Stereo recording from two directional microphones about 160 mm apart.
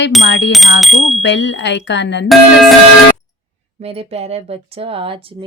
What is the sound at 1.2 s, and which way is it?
A woman's voice, 90° left.